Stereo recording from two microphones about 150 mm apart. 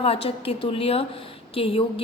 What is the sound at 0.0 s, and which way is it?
A woman's voice, 40° left (ahead or behind).